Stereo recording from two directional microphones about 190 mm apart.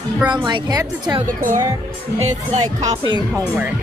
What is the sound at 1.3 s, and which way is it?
A woman's voice, 45° right (ahead or behind).